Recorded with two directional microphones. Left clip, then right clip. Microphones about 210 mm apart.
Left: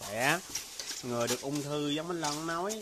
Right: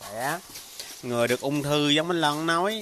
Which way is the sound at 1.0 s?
25° right (ahead or behind).